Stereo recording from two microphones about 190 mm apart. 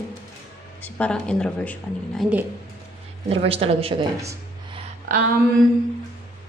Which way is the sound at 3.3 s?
30° right (ahead or behind).